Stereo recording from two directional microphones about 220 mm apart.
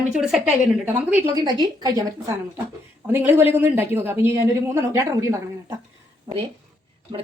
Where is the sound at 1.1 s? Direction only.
15° right (ahead or behind).